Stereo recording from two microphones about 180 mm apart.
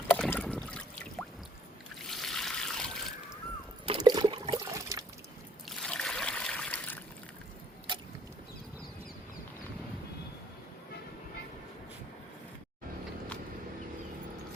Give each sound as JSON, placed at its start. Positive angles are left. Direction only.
{"t": 0.1, "sound": "trickle", "side_deg": 10}
{"t": 2.0, "sound": "water", "side_deg": 0}
{"t": 3.8, "sound": "toilet flush", "side_deg": -25}
{"t": 4.7, "sound": "liquid", "side_deg": -15}
{"t": 5.6, "sound": "trickle", "side_deg": 5}
{"t": 7.9, "sound": "vehicle", "side_deg": -25}